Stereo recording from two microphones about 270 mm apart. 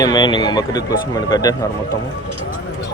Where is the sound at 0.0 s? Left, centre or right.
Centre.